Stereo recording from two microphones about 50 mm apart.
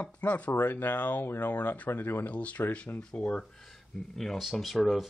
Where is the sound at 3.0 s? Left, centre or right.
Centre.